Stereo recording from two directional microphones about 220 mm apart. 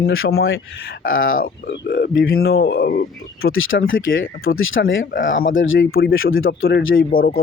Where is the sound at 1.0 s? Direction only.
65° left (ahead or behind).